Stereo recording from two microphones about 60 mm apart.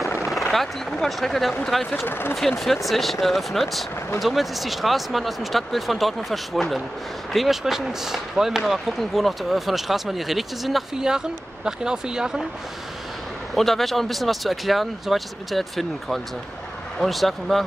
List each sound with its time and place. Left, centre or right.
0.2 s speech: centre
2.0 s speech: left
2.6 s speech: centre
13.6 s speech: centre